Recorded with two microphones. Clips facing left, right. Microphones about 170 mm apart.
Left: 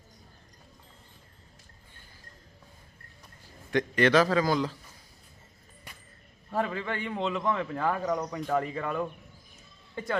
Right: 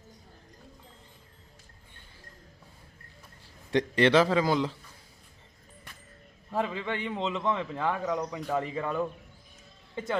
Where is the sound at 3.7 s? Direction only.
25° right (ahead or behind).